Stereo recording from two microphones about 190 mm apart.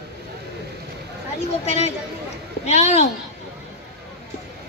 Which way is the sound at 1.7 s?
35° left (ahead or behind).